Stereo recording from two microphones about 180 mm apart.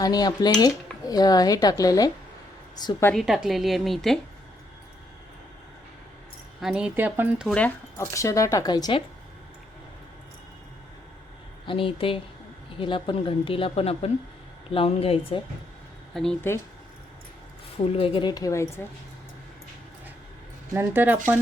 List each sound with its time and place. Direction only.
0.0 s speech: 20° left (ahead or behind)
3.1 s a woman's voice: centre (ahead or behind)
6.6 s speech: 5° right (ahead or behind)
7.4 s speech: 5° left (ahead or behind); by 9.0 s 20° left (ahead or behind)
11.6 s speech: 30° left (ahead or behind)
16.1 s a woman's voice: 5° left (ahead or behind)
17.9 s speech: 30° left (ahead or behind)
20.7 s speech: 10° right (ahead or behind)